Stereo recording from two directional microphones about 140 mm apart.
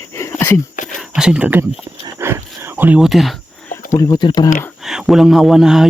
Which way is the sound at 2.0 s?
20° right (ahead or behind).